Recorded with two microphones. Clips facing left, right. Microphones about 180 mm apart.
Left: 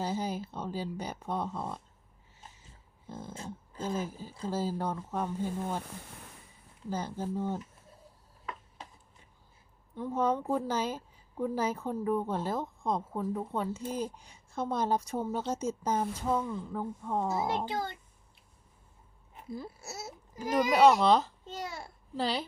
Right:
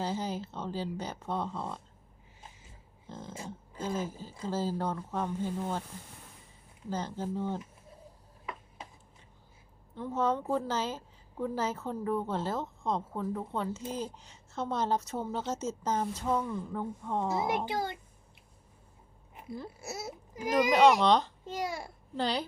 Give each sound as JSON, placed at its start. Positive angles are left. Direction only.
{"t": 0.0, "sound": "a woman's voice", "side_deg": 10}
{"t": 3.1, "sound": "a woman's voice", "side_deg": 10}
{"t": 3.3, "sound": "speech", "side_deg": -10}
{"t": 3.9, "sound": "a woman's voice", "side_deg": 10}
{"t": 6.9, "sound": "a woman's voice", "side_deg": 10}
{"t": 9.9, "sound": "a woman's voice", "side_deg": 10}
{"t": 17.7, "sound": "a child's voice", "side_deg": -15}
{"t": 20.3, "sound": "a child's voice", "side_deg": -15}
{"t": 21.0, "sound": "a woman's voice", "side_deg": 5}
{"t": 21.4, "sound": "a child's voice", "side_deg": -15}
{"t": 22.1, "sound": "a woman's voice", "side_deg": 0}